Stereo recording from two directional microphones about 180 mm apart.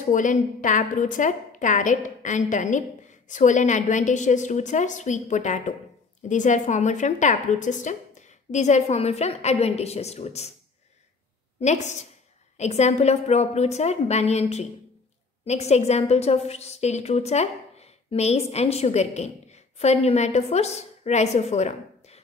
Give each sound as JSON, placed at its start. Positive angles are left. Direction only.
{"t": 0.1, "sound": "a woman's voice", "side_deg": 45}
{"t": 11.6, "sound": "a woman's voice", "side_deg": 40}